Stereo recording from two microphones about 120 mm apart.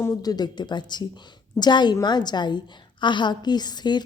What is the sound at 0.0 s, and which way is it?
A woman's voice, 30° left (ahead or behind).